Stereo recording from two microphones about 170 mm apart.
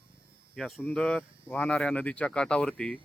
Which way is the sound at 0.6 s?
Centre (ahead or behind).